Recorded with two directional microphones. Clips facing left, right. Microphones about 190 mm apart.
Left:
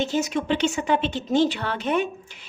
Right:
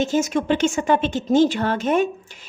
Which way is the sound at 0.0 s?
45° right (ahead or behind).